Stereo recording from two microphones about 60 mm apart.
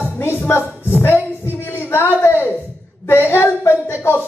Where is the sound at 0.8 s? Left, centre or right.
Left.